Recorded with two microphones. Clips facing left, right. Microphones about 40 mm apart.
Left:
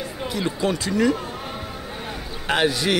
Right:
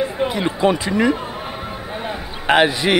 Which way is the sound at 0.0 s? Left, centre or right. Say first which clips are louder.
Right 7 dB; right.